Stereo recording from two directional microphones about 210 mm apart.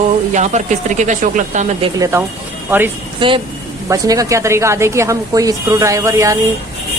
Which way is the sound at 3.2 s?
25° right (ahead or behind).